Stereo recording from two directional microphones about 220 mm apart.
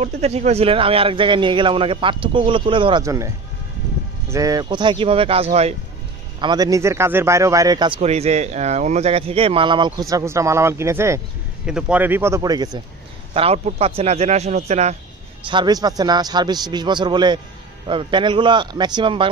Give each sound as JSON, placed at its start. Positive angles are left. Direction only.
{"t": 0.0, "sound": "speech", "side_deg": -30}
{"t": 4.3, "sound": "speech", "side_deg": -15}
{"t": 6.4, "sound": "speech", "side_deg": -15}
{"t": 8.0, "sound": "speech", "side_deg": -30}
{"t": 15.4, "sound": "speech", "side_deg": -20}